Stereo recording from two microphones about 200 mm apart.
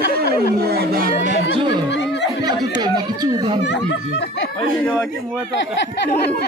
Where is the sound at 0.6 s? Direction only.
50° right (ahead or behind).